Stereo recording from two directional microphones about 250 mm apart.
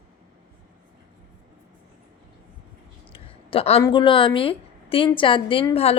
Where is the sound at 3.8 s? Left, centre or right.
Centre.